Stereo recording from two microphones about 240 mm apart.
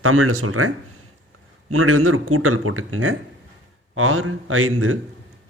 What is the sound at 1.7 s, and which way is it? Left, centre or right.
Speech, right.